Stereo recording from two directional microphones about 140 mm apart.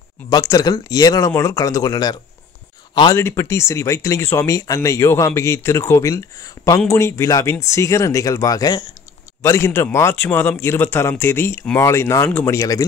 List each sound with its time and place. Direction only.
0.3 s speech: 25° left (ahead or behind)
3.2 s speech: 20° left (ahead or behind)